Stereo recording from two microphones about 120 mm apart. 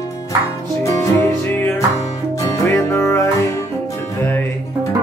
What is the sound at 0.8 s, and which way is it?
Music, 25° left (ahead or behind).